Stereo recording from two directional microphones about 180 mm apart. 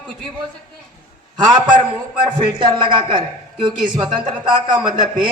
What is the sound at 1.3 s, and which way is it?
A man's voice, 25° right (ahead or behind).